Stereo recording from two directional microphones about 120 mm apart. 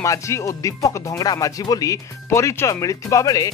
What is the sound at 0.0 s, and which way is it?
Speech, 25° left (ahead or behind).